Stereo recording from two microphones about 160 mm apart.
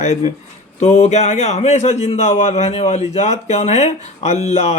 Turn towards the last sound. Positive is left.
turn(degrees=40)  # may be behind; listen again after turning